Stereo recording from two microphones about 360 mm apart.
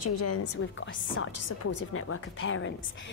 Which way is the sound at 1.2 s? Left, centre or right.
Left.